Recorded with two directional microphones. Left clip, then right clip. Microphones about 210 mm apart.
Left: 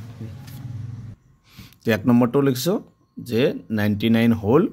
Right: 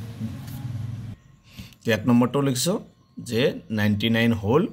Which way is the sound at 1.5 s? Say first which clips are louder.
Left 2 dB; 50° left (ahead or behind).